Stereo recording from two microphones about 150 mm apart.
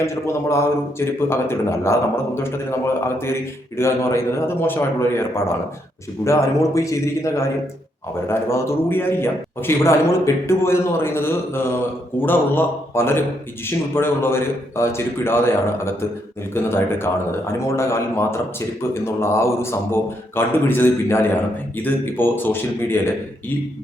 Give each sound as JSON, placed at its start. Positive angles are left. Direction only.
{"t": 0.0, "sound": "a man's voice", "side_deg": 20}